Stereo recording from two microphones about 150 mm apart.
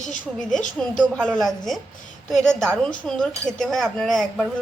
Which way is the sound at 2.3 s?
5° left (ahead or behind).